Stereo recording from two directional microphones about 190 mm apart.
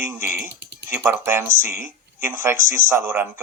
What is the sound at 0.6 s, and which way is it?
Typing, 65° right (ahead or behind).